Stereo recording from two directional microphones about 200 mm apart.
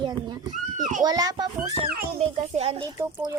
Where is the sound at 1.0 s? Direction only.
20° right (ahead or behind).